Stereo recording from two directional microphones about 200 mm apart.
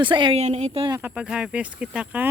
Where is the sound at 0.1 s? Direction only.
25° right (ahead or behind).